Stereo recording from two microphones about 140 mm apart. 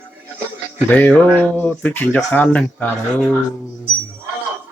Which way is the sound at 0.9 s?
10° left (ahead or behind).